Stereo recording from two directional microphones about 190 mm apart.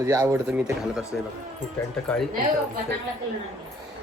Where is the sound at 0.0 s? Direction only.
20° right (ahead or behind).